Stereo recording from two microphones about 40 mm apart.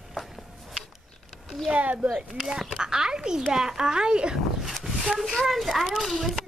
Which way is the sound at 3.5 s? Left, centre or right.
Centre.